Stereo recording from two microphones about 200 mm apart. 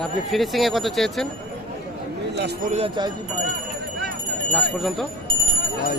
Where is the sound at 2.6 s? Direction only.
35° right (ahead or behind).